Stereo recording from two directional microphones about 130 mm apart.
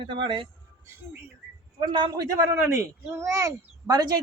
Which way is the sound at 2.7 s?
20° right (ahead or behind).